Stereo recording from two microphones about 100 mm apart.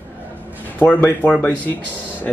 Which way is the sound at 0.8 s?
20° left (ahead or behind).